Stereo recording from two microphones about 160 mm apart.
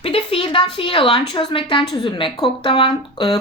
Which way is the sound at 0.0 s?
35° left (ahead or behind).